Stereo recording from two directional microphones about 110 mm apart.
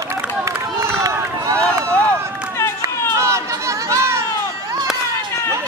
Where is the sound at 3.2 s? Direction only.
25° right (ahead or behind).